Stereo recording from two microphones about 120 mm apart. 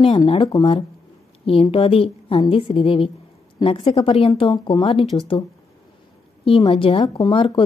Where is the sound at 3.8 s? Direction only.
55° left (ahead or behind).